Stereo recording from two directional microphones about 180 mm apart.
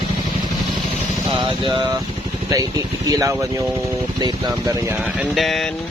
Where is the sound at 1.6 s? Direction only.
25° right (ahead or behind).